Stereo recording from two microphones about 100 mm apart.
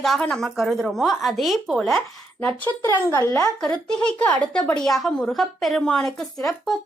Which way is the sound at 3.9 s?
10° left (ahead or behind).